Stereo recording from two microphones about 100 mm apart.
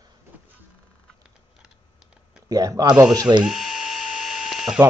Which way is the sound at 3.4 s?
5° right (ahead or behind).